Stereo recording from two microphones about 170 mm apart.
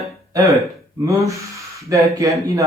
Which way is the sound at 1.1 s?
20° right (ahead or behind).